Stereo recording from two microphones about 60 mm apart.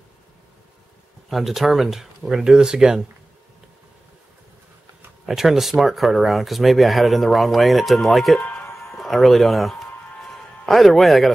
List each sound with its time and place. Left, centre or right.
1.3 s speech: centre
5.2 s speech: centre
8.4 s music: left
8.8 s music: centre